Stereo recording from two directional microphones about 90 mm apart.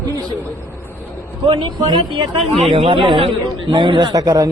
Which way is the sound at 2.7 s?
75° right (ahead or behind).